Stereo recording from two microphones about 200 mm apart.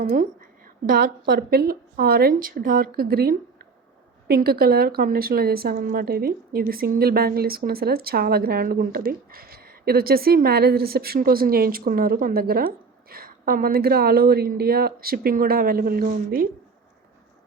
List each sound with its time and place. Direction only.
0.0 s a woman's voice: 40° right (ahead or behind)